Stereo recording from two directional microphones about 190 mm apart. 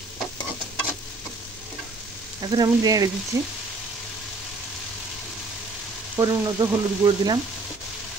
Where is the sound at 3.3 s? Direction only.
15° right (ahead or behind).